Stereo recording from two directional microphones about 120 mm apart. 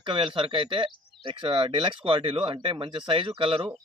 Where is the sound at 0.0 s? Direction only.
45° right (ahead or behind).